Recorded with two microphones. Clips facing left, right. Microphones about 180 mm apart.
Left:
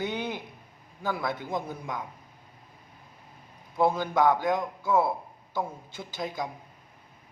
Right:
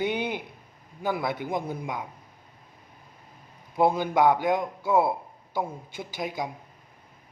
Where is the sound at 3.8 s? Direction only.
15° right (ahead or behind).